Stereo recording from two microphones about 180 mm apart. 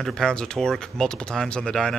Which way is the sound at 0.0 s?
5° left (ahead or behind).